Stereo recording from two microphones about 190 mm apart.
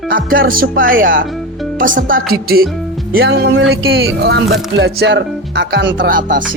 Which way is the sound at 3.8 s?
75° right (ahead or behind).